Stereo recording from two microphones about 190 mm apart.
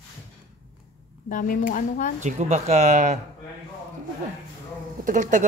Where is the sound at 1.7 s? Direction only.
45° left (ahead or behind).